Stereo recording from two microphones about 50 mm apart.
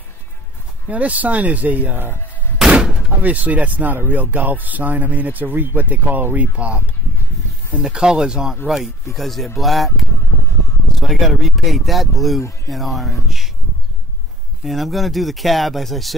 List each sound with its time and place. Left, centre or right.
0.8 s speech: right
3.2 s speech: right
7.8 s speech: centre
14.6 s speech: centre